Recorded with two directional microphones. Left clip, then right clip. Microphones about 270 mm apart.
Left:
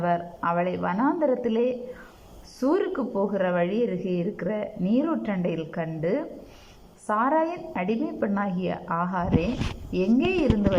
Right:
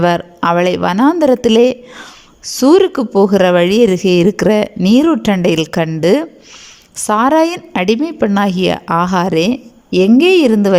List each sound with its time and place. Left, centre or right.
0.0 s speech: right